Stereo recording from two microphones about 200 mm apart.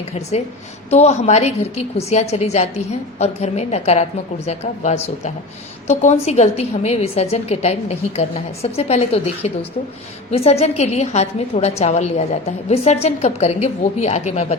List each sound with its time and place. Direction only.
0.1 s a woman's voice: 35° left (ahead or behind)